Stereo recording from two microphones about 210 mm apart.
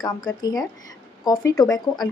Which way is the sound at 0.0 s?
20° left (ahead or behind).